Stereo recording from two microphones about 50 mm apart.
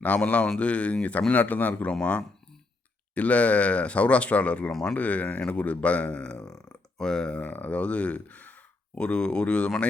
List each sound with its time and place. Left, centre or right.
0.0 s speech: left
7.4 s speech: left
9.0 s speech: left